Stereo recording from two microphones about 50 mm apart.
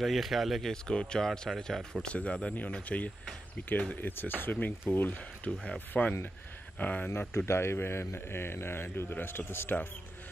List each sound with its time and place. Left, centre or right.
0.0 s speech: centre
0.7 s speech: centre
2.0 s speech: left
5.5 s speech: centre
6.8 s speech: left
7.2 s a man's voice: left